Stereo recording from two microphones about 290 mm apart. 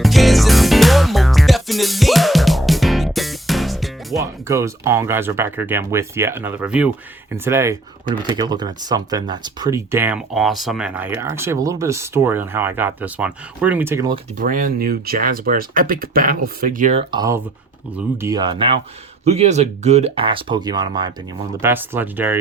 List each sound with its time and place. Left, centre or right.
0.0 s music: centre
4.2 s speech: centre
14.3 s speech: right; by 22.4 s centre